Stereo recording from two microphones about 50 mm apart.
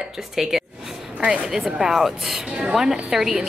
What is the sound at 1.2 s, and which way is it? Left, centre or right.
Speech, centre.